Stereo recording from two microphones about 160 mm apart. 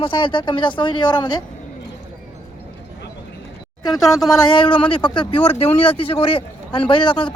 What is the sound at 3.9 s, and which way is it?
Speech, centre (ahead or behind).